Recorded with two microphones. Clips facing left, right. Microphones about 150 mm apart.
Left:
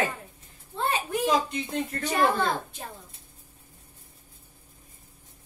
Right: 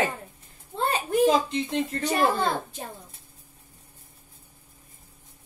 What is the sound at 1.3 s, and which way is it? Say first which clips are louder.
Speech: right 2 dB; 30° right (ahead or behind).